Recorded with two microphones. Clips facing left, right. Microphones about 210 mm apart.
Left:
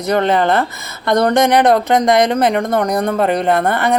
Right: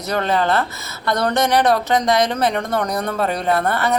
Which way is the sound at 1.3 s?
55° left (ahead or behind).